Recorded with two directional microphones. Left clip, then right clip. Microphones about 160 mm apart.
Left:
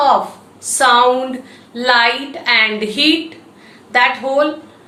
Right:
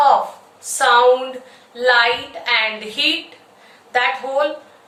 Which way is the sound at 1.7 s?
20° left (ahead or behind).